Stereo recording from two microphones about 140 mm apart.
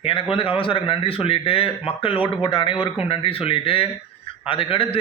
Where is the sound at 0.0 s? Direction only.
40° left (ahead or behind).